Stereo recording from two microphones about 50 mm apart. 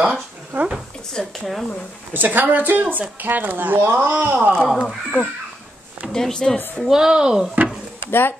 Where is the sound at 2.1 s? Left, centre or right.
Right.